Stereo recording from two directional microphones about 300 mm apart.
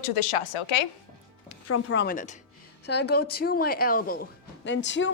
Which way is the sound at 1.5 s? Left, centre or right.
Left.